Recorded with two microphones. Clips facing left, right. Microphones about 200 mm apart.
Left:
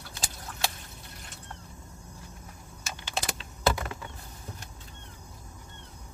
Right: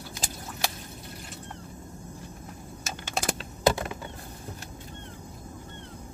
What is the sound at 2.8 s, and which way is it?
Typing, 45° right (ahead or behind).